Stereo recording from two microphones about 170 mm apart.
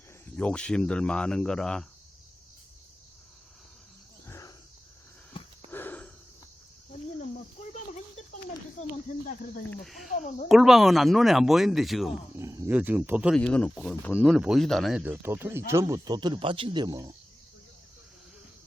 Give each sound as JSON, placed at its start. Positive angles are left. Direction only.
{"t": 0.3, "sound": "speech", "side_deg": 5}
{"t": 4.3, "sound": "a sound", "side_deg": 20}
{"t": 5.3, "sound": "a sound", "side_deg": 30}
{"t": 5.7, "sound": "a sound", "side_deg": 10}
{"t": 7.2, "sound": "a sound", "side_deg": 45}
{"t": 9.6, "sound": "speech", "side_deg": 0}
{"t": 10.2, "sound": "speech", "side_deg": 45}
{"t": 10.5, "sound": "speech", "side_deg": 0}
{"t": 12.4, "sound": "wild animals", "side_deg": -20}
{"t": 12.7, "sound": "speech", "side_deg": -10}
{"t": 13.3, "sound": "speech", "side_deg": 5}
{"t": 14.2, "sound": "speech", "side_deg": -5}
{"t": 15.0, "sound": "speech", "side_deg": -15}